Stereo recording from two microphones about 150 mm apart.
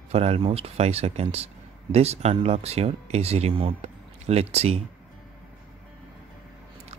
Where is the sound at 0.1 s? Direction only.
45° right (ahead or behind).